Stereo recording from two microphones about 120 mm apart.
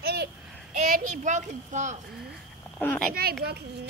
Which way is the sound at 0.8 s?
90° right.